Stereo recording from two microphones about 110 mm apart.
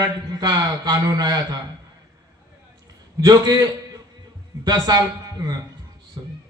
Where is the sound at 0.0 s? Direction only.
35° right (ahead or behind).